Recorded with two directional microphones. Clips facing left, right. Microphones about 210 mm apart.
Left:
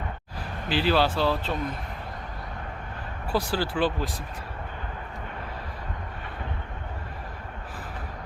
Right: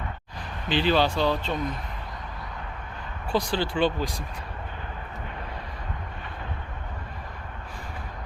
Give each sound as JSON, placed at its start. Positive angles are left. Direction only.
{"t": 0.7, "sound": "speech", "side_deg": 5}
{"t": 3.3, "sound": "speech", "side_deg": 5}